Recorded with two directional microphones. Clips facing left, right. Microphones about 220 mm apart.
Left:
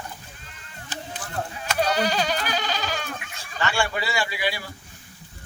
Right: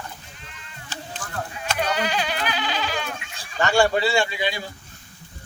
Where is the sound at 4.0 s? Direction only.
30° right (ahead or behind).